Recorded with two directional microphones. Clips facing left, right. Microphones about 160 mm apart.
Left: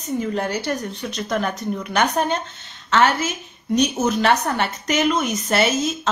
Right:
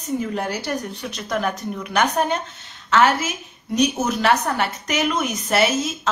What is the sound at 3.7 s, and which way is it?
A woman's voice, 5° right (ahead or behind).